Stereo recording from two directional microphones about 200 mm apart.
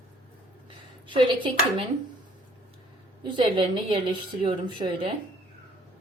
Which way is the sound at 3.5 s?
25° right (ahead or behind).